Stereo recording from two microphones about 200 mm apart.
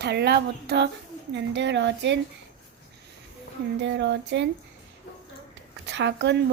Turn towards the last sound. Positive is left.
turn(degrees=-60)  # may be behind; listen again after turning